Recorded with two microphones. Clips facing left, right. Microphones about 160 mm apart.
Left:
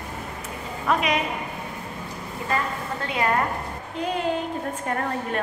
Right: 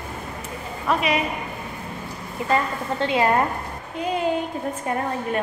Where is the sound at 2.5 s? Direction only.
25° right (ahead or behind).